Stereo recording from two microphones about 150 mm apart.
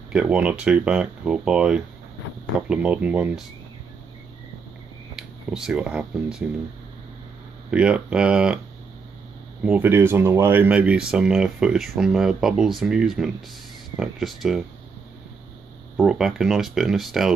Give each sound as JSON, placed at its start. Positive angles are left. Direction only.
{"t": 0.1, "sound": "speech", "side_deg": -5}
{"t": 5.5, "sound": "speech", "side_deg": -5}
{"t": 7.7, "sound": "speech", "side_deg": -5}
{"t": 9.6, "sound": "speech", "side_deg": -10}
{"t": 16.0, "sound": "speech", "side_deg": -5}